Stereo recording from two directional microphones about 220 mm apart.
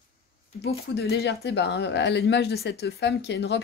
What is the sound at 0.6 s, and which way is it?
Speech, 50° left (ahead or behind).